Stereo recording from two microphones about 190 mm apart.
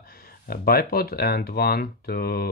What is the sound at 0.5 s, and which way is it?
Speech, 55° left (ahead or behind).